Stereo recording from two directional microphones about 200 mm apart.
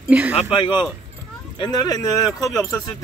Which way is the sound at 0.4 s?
25° left (ahead or behind).